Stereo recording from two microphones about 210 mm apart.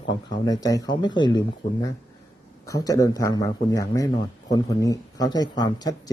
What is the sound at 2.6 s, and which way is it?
Speech, 15° left (ahead or behind).